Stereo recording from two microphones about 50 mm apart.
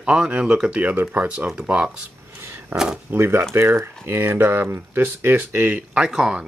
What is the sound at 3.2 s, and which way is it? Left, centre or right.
Speech, right.